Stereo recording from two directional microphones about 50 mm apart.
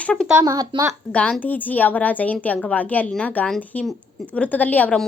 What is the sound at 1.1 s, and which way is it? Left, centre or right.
Speech, left.